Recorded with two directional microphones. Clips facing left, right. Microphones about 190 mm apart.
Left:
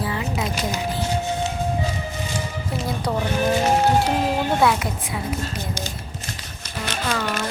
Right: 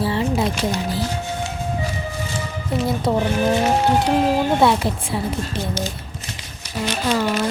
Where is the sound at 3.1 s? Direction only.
25° right (ahead or behind).